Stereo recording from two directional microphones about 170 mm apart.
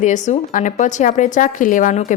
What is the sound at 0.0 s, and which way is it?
A woman's voice, 45° left (ahead or behind).